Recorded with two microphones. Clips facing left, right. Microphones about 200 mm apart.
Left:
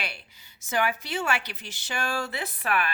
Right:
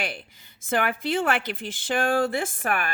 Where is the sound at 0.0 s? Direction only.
50° right (ahead or behind).